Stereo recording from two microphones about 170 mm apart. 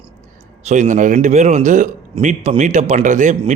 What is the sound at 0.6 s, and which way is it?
A man's voice, 45° right (ahead or behind).